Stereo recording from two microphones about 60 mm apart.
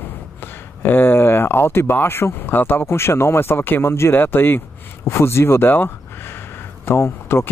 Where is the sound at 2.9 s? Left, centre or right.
Left.